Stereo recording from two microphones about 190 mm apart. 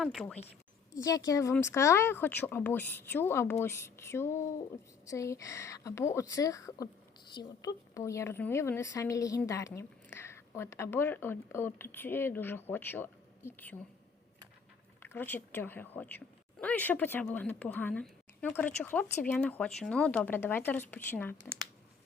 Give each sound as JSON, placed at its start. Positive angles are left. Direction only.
{"t": 0.0, "sound": "speech", "side_deg": 0}
{"t": 1.0, "sound": "speech", "side_deg": 20}
{"t": 15.0, "sound": "speech", "side_deg": 10}